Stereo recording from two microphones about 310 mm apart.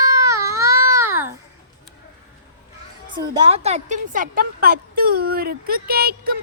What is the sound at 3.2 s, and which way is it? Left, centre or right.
A woman's voice, centre.